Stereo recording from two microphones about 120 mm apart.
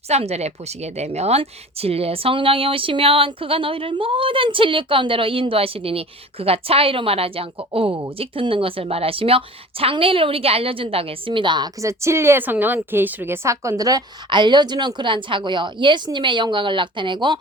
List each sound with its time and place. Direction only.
0.1 s speech: 60° right (ahead or behind); by 11.7 s 40° right (ahead or behind)
11.8 s a woman's voice: 25° right (ahead or behind); by 17.4 s 40° right (ahead or behind)